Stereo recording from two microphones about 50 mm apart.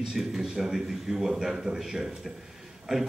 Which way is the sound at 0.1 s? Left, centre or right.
Centre.